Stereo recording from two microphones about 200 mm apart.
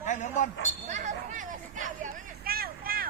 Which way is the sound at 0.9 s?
35° right (ahead or behind).